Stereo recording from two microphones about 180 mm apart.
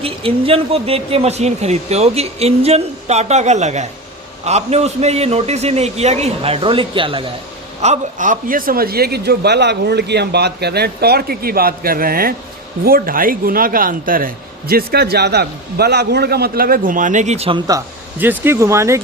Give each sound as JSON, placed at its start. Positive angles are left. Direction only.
{"t": 0.0, "sound": "speech", "side_deg": -30}
{"t": 7.8, "sound": "a man's voice", "side_deg": -40}
{"t": 17.7, "sound": "speech", "side_deg": -15}